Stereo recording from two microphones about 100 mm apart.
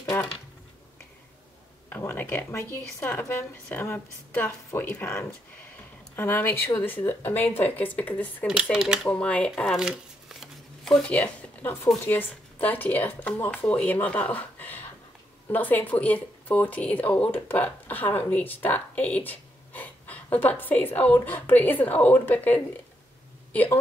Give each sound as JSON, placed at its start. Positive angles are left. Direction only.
{"t": 0.1, "sound": "a sound", "side_deg": 25}
{"t": 1.9, "sound": "a woman's voice", "side_deg": 20}
{"t": 8.7, "sound": "speech", "side_deg": -5}
{"t": 9.1, "sound": "speech", "side_deg": 10}
{"t": 9.8, "sound": "a sound", "side_deg": -5}
{"t": 10.9, "sound": "speech", "side_deg": 10}
{"t": 11.1, "sound": "speech", "side_deg": 25}